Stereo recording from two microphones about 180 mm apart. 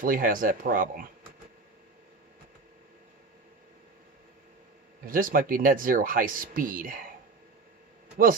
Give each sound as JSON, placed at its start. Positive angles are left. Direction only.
{"t": 0.0, "sound": "speech", "side_deg": -50}
{"t": 5.0, "sound": "speech", "side_deg": -50}